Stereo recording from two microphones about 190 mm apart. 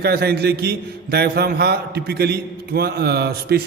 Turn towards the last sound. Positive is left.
turn(degrees=-55)  # may be behind; listen again after turning